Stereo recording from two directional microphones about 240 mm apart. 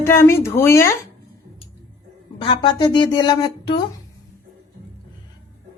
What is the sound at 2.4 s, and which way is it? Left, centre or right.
A woman's voice, centre.